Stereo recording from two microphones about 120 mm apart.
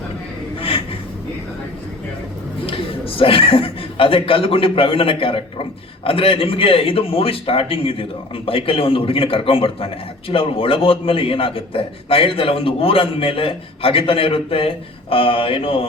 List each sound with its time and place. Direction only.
2.6 s a man's voice: 50° left (ahead or behind)